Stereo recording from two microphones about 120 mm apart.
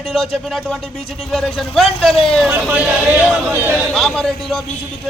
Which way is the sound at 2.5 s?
10° right (ahead or behind).